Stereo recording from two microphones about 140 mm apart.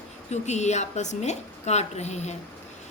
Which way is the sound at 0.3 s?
55° left (ahead or behind).